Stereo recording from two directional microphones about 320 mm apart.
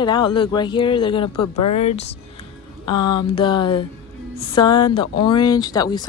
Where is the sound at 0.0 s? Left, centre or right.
Centre.